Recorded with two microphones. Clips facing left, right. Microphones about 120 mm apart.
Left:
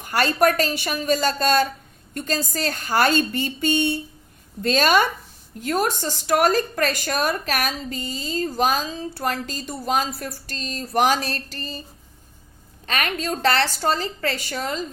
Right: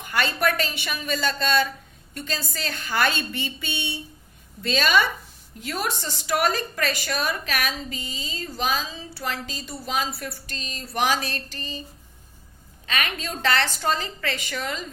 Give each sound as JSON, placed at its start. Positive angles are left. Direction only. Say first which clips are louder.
{"t": 0.0, "sound": "a woman's voice", "louder": "left 5 dB", "side_deg": 40}
{"t": 12.8, "sound": "a woman's voice", "louder": "left 3 dB", "side_deg": 40}